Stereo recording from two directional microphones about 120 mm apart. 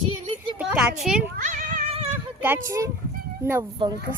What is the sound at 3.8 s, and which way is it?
Speech, 45° right (ahead or behind).